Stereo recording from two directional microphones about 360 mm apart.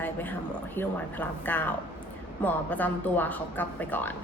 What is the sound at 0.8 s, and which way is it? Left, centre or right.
A woman's voice, centre.